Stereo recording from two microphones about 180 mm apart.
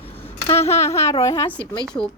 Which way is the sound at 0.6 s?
35° left (ahead or behind).